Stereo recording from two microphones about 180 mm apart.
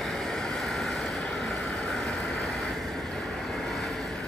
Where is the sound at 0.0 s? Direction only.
Centre (ahead or behind).